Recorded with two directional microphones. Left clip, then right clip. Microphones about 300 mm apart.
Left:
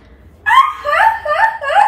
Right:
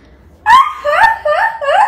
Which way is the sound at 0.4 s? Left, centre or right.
Centre.